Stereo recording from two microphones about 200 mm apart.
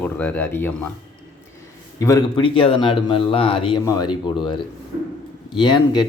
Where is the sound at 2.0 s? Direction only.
15° left (ahead or behind).